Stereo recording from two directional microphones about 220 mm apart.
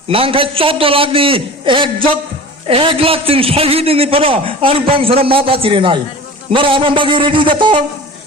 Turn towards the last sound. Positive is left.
turn(degrees=-20)  # may be behind; listen again after turning